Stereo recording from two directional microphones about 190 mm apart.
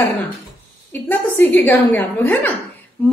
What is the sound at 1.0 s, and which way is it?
A woman's voice, 10° left (ahead or behind).